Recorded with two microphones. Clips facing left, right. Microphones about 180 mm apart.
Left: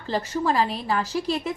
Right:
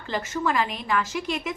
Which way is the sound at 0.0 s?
35° left (ahead or behind).